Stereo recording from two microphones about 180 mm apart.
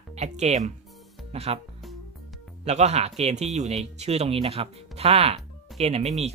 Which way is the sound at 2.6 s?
40° right (ahead or behind).